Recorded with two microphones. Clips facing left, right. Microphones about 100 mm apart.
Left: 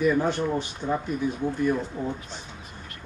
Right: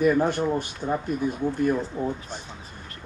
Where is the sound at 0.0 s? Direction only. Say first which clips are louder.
Right 2 dB; 50° right (ahead or behind).